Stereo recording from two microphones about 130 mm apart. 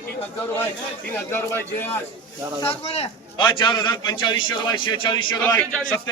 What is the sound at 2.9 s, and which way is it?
Speech, 50° left (ahead or behind).